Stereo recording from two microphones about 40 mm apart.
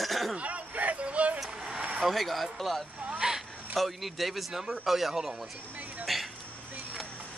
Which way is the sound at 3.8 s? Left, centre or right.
Centre.